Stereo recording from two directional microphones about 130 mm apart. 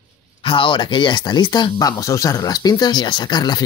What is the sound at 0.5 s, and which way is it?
Speech, 40° left (ahead or behind).